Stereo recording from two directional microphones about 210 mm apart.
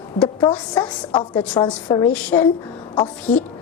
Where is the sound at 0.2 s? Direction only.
5° left (ahead or behind).